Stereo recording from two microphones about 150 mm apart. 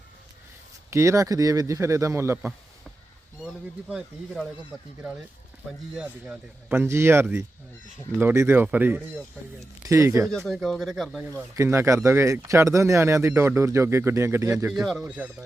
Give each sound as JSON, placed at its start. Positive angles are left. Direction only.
{"t": 0.9, "sound": "speech", "side_deg": -20}
{"t": 3.4, "sound": "speech", "side_deg": -5}
{"t": 5.9, "sound": "speech", "side_deg": -5}
{"t": 10.3, "sound": "speech", "side_deg": 0}
{"t": 11.2, "sound": "speech", "side_deg": -20}
{"t": 14.7, "sound": "speech", "side_deg": 0}
{"t": 15.0, "sound": "speech", "side_deg": -10}